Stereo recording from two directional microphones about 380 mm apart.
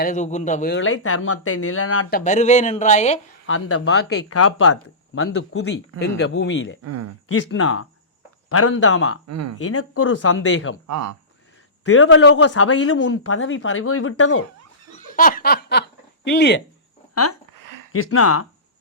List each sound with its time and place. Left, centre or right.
0.0 s speech: centre; by 2.0 s left
2.0 s speech: left
3.4 s speech: left
6.8 s speech: right
7.3 s speech: left
9.2 s speech: right
9.6 s speech: left
10.8 s speech: right
11.9 s speech: left
14.9 s laughter: left
16.2 s speech: left
17.6 s a sound: right
17.9 s speech: left